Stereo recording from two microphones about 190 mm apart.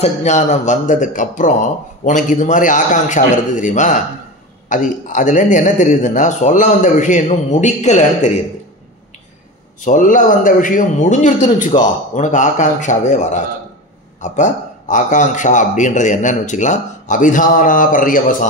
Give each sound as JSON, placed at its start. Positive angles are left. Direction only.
{"t": 0.0, "sound": "a man's voice", "side_deg": 40}
{"t": 9.8, "sound": "a man's voice", "side_deg": 45}